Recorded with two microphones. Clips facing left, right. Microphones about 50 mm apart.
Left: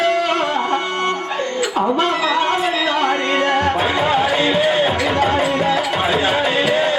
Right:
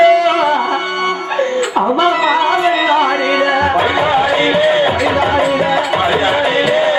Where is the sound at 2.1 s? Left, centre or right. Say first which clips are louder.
Right 5 dB; centre.